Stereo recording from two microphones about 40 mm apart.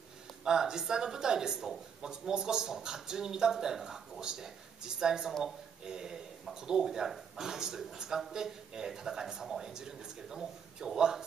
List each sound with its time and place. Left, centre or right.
0.4 s speech: centre
11.0 s speech: centre